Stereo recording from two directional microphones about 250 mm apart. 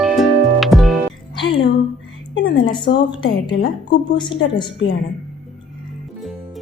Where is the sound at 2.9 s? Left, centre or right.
Left.